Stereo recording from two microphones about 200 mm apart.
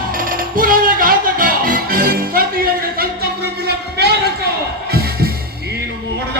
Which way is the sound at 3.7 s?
55° right (ahead or behind).